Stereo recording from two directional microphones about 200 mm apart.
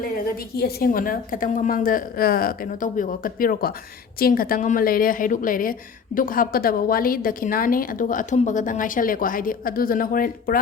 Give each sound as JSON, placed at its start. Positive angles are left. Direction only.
{"t": 0.0, "sound": "a woman's voice", "side_deg": 50}